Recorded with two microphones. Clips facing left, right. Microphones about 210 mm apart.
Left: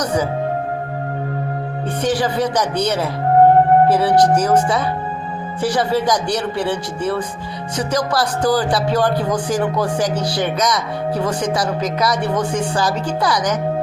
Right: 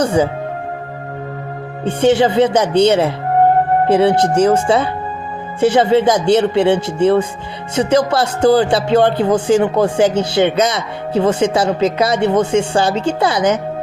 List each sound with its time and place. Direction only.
0.0 s speech: 30° right (ahead or behind)
1.8 s speech: 25° right (ahead or behind)